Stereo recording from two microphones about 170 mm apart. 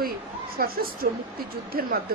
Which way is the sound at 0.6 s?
60° right (ahead or behind).